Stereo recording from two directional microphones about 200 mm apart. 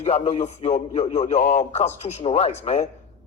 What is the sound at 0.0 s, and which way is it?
A man's voice, 30° left (ahead or behind).